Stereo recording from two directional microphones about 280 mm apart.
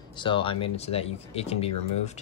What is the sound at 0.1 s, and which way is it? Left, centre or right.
Speech, centre.